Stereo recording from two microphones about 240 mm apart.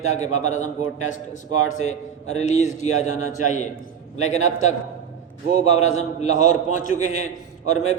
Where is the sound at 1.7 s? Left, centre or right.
Left.